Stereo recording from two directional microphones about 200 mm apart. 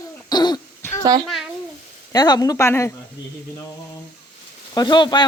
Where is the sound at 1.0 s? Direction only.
20° right (ahead or behind).